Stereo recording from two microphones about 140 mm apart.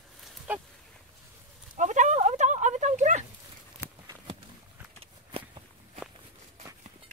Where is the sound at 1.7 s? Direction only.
60° right (ahead or behind).